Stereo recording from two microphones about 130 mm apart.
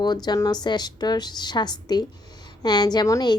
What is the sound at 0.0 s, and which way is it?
A woman's voice, 35° left (ahead or behind).